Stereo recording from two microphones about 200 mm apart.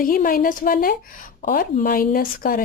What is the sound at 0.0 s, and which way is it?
Speech, 45° left (ahead or behind).